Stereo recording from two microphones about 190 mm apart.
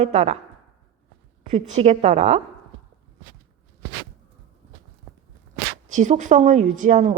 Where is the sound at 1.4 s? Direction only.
35° right (ahead or behind).